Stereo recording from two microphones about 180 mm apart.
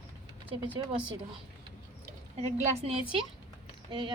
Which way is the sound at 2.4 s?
35° right (ahead or behind).